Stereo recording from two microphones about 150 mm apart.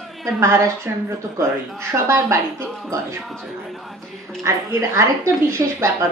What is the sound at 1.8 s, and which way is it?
Speech, 20° right (ahead or behind).